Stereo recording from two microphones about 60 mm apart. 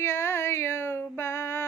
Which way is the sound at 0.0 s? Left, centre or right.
Left.